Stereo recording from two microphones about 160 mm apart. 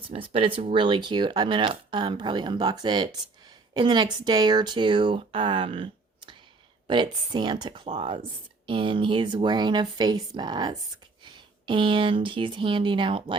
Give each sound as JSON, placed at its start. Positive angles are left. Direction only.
{"t": 0.1, "sound": "speech", "side_deg": -35}